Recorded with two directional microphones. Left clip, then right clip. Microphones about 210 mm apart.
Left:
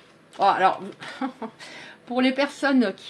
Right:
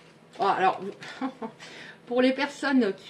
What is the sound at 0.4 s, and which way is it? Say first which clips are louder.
Speech: left 4 dB; 40° left (ahead or behind).